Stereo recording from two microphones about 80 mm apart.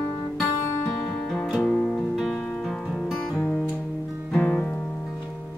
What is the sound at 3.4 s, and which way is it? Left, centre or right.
Music, centre.